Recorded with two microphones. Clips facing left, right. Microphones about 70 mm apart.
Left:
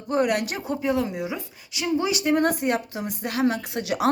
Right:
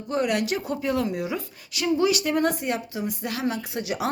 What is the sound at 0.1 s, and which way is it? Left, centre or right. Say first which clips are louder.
Speech: left 2 dB; left.